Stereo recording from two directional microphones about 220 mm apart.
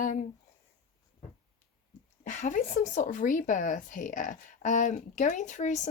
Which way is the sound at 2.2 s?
35° left (ahead or behind).